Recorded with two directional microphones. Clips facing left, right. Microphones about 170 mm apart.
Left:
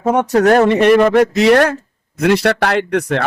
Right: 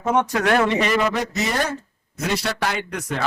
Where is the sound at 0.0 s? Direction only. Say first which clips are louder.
Left 8 dB; 45° left (ahead or behind).